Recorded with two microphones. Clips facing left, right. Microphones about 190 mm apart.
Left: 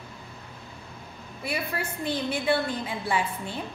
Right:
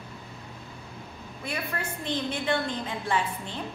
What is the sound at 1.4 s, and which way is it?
A woman's voice, 10° left (ahead or behind).